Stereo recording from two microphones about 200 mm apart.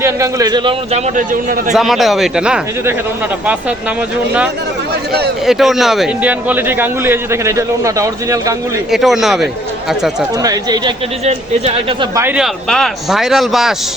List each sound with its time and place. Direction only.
0.0 s a man's voice: 15° right (ahead or behind); by 1.7 s 40° right (ahead or behind)
1.7 s speech: centre (ahead or behind)
5.5 s a man's voice: centre (ahead or behind)
8.9 s speech: centre (ahead or behind)
10.4 s a man's voice: 20° right (ahead or behind)
11.3 s speech: 30° right (ahead or behind)
12.1 s a man's voice: 10° right (ahead or behind)
12.6 s speech: 5° left (ahead or behind)